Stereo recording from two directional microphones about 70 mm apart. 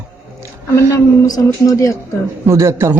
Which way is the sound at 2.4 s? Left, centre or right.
Right.